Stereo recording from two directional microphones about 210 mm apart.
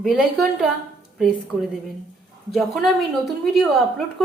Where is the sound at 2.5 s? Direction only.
Centre (ahead or behind).